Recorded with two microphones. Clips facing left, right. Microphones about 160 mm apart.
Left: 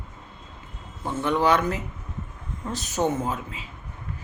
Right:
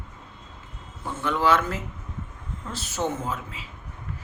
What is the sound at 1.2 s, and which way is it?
Speech, 15° left (ahead or behind).